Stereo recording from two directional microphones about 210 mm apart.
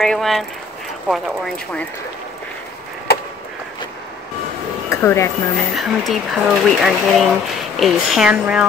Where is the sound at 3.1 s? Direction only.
50° left (ahead or behind).